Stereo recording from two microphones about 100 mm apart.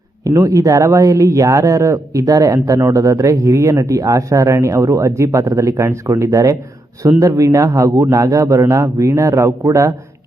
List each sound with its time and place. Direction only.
0.3 s speech: 35° right (ahead or behind)